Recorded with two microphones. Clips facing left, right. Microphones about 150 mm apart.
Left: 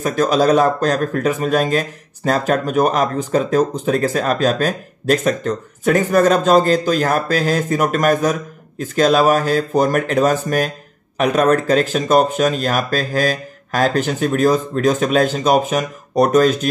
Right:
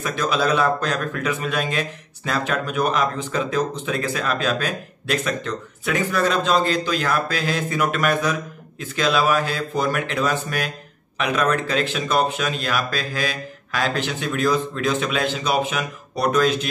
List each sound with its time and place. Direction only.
0.0 s a man's voice: 40° left (ahead or behind)